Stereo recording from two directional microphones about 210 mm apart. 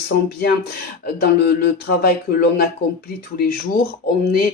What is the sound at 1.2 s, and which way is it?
Speech, 50° left (ahead or behind).